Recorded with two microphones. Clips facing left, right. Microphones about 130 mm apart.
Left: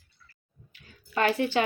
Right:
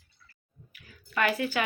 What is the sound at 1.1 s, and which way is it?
Speech, 30° left (ahead or behind).